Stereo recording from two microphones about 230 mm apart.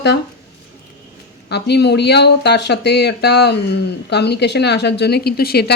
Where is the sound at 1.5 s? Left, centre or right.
Left.